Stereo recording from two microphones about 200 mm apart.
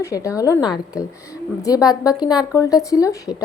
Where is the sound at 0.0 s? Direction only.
15° left (ahead or behind).